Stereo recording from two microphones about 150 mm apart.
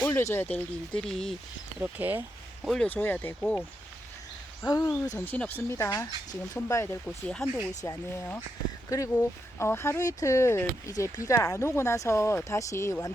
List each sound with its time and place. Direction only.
0.0 s speech: 20° left (ahead or behind)
1.8 s speech: 10° right (ahead or behind)
2.6 s speech: 5° left (ahead or behind)
4.6 s speech: 20° left (ahead or behind)
7.3 s speech: 5° left (ahead or behind)
7.9 s speech: 20° left (ahead or behind)
9.6 s speech: 15° left (ahead or behind)